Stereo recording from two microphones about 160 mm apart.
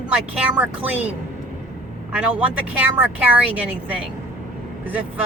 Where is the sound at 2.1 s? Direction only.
10° right (ahead or behind).